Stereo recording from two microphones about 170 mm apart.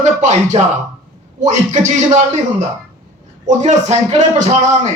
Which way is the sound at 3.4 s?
40° right (ahead or behind).